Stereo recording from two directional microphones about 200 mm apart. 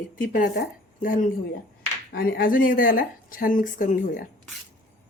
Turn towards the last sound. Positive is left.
turn(degrees=40)  # may be behind; listen again after turning